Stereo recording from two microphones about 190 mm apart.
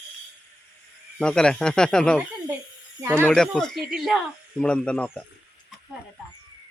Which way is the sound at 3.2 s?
5° left (ahead or behind).